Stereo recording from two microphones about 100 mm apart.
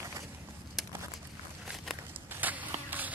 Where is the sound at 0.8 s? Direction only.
Centre (ahead or behind).